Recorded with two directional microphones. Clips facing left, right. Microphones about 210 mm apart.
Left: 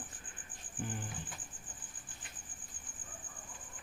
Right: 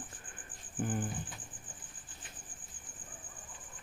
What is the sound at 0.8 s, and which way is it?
Cricket, 50° right (ahead or behind).